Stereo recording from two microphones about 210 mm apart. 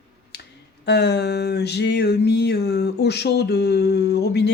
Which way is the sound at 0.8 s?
55° left (ahead or behind).